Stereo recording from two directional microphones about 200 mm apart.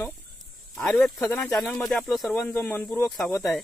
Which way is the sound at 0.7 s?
Centre (ahead or behind).